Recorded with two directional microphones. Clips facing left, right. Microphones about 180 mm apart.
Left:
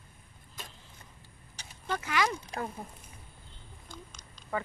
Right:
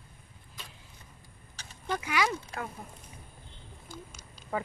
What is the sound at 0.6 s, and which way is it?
Vehicle, 45° left (ahead or behind).